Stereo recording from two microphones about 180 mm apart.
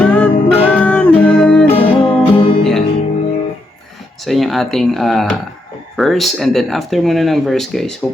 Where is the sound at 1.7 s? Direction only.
30° left (ahead or behind).